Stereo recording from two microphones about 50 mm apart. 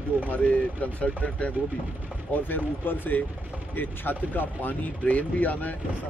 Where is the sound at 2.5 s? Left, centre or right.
Left.